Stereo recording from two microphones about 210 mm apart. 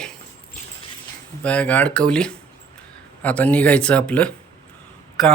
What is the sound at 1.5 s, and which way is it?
Speech, 5° left (ahead or behind).